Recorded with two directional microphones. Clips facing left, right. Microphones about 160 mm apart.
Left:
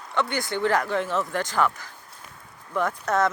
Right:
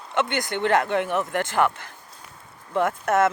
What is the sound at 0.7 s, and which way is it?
Speech, 20° right (ahead or behind).